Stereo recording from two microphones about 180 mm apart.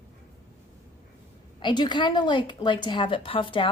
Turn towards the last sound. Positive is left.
turn(degrees=30)  # may be behind; listen again after turning